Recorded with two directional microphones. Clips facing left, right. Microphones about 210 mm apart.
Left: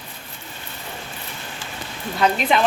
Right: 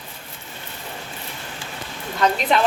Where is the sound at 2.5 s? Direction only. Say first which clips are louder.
Even; 5° left (ahead or behind).